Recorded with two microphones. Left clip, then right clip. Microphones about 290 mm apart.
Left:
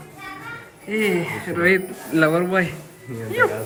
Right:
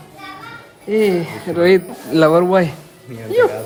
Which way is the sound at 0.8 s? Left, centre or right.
Centre.